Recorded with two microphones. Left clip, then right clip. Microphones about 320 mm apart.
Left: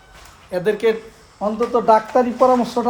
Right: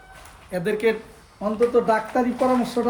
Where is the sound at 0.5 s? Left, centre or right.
Centre.